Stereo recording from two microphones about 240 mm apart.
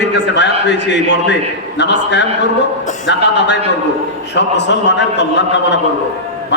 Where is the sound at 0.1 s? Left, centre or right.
Left.